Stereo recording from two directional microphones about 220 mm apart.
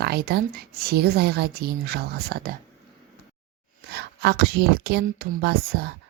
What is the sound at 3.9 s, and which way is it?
Speech, 50° right (ahead or behind).